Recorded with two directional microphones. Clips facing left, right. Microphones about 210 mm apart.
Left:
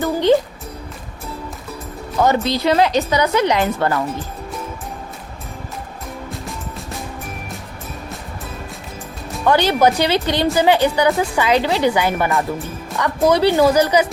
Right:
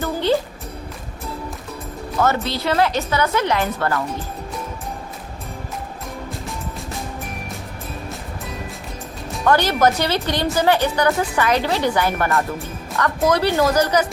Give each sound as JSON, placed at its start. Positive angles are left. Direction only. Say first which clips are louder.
{"t": 0.0, "sound": "music", "louder": "left 5 dB", "side_deg": 15}
{"t": 2.2, "sound": "a woman's voice", "louder": "left 4 dB", "side_deg": 15}
{"t": 9.4, "sound": "a woman's voice", "louder": "left 2 dB", "side_deg": 10}